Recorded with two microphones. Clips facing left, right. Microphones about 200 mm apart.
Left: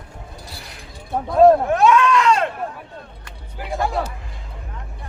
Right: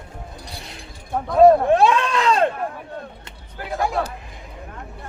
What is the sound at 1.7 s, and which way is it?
Speech, 30° right (ahead or behind).